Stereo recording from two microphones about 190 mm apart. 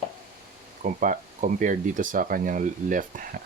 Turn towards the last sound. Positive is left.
turn(degrees=-45)  # may be behind; listen again after turning